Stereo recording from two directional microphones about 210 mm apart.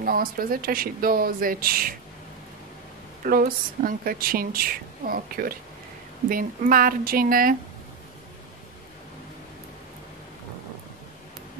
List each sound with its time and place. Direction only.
0.0 s a woman's voice: 45° right (ahead or behind)
3.3 s a woman's voice: 45° right (ahead or behind)